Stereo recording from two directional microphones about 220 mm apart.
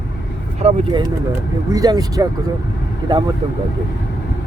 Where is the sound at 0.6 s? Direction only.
30° right (ahead or behind).